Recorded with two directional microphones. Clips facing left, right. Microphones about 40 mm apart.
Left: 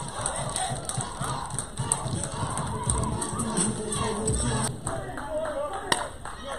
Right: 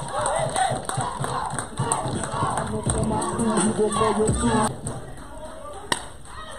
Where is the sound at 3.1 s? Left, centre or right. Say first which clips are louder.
Right 8 dB; right.